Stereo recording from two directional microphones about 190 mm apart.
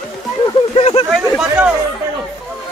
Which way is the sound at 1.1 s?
5° right (ahead or behind).